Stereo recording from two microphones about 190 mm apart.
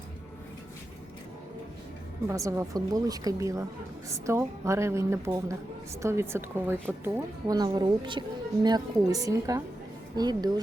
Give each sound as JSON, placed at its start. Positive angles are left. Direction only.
{"t": 2.2, "sound": "a woman's voice", "side_deg": -15}